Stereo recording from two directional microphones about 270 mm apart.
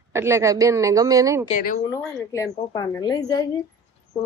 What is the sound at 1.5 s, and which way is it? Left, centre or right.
Speech, left.